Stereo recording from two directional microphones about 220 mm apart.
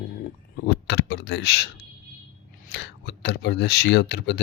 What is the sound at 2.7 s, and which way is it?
Speech, 50° left (ahead or behind).